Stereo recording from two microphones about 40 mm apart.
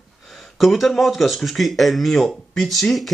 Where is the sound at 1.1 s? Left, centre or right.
Centre.